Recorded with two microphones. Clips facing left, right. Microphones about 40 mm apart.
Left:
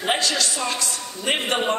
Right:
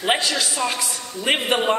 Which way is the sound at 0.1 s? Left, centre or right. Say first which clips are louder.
Right 1 dB; centre.